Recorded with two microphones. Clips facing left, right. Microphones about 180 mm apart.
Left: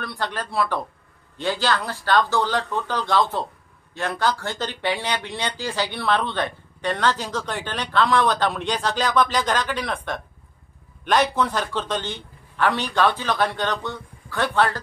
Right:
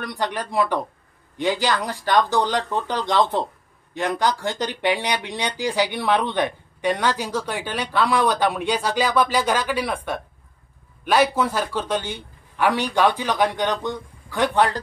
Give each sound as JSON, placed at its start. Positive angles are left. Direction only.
{"t": 0.0, "sound": "speech", "side_deg": -15}